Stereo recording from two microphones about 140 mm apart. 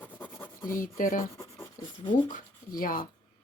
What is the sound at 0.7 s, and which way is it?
Speech, 75° left (ahead or behind).